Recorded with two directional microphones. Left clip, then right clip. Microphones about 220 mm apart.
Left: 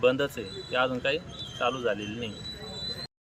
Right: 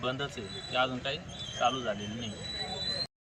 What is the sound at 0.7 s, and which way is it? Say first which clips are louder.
Speech: left 4 dB; 15° left (ahead or behind).